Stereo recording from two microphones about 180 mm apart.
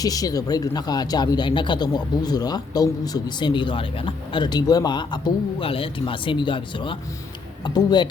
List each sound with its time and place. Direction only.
0.0 s speech: 20° left (ahead or behind)